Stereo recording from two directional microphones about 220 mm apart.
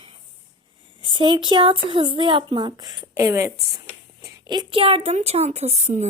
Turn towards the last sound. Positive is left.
turn(degrees=-30)  # may be behind; listen again after turning